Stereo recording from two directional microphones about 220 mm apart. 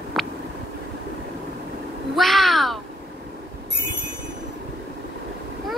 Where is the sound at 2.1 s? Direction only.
Centre (ahead or behind).